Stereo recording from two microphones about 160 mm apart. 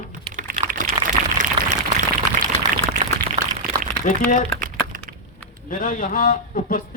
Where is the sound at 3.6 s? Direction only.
65° right (ahead or behind).